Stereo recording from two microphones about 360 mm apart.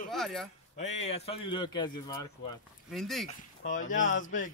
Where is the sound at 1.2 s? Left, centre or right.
Centre.